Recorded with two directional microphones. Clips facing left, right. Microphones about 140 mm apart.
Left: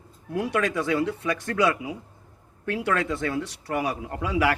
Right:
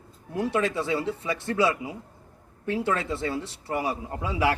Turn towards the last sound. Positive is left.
turn(degrees=-25)  # may be behind; listen again after turning